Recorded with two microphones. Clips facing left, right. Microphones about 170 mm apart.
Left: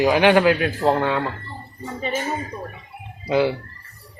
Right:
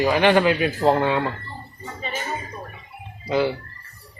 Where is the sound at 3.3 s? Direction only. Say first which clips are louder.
Left 2 dB; 10° left (ahead or behind).